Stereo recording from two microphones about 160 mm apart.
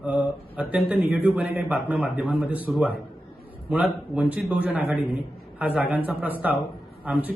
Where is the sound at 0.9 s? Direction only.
5° right (ahead or behind).